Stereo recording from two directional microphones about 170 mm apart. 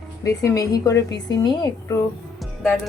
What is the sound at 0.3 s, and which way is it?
Speech, 20° left (ahead or behind).